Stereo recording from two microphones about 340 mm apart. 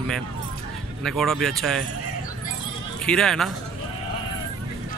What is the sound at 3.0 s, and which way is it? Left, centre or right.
Speech, centre.